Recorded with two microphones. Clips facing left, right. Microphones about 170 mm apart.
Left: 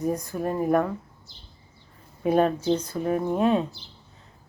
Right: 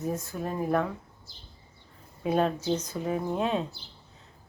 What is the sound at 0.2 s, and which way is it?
Speech, 15° left (ahead or behind).